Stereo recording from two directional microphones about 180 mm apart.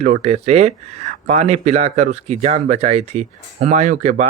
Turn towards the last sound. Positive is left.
turn(degrees=-40)  # may be behind; listen again after turning